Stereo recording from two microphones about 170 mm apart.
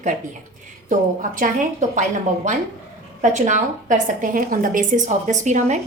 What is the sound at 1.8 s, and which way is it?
Speech, 45° right (ahead or behind).